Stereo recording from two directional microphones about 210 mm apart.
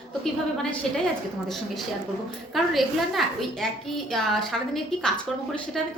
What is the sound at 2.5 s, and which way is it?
A woman's voice, centre (ahead or behind).